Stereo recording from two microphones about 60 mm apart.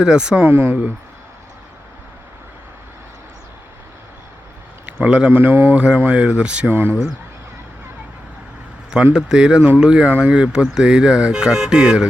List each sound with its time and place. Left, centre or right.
0.0 s speech: centre
0.4 s speech: right
4.9 s a man's voice: centre
5.3 s speech: right
5.7 s speech: centre
6.7 s speech: right
9.1 s speech: centre